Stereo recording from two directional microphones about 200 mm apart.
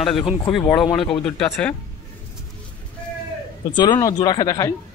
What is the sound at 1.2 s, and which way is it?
Speech, 5° left (ahead or behind).